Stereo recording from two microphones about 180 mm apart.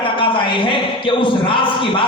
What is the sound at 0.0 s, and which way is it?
A man's voice, 30° left (ahead or behind).